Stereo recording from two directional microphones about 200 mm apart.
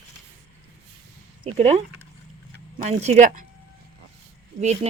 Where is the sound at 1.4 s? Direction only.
30° right (ahead or behind).